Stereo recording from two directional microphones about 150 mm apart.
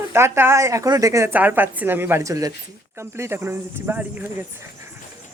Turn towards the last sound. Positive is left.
turn(degrees=-15)  # may be behind; listen again after turning